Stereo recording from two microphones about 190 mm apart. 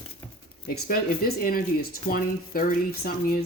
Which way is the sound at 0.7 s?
50° left (ahead or behind).